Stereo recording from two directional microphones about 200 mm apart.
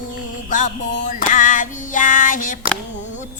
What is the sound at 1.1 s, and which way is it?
Music, 40° left (ahead or behind).